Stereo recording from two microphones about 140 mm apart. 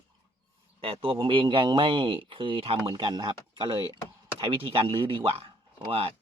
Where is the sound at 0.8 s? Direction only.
40° right (ahead or behind).